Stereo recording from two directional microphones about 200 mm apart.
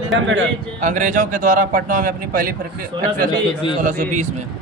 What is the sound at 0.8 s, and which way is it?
A man's voice, 40° right (ahead or behind).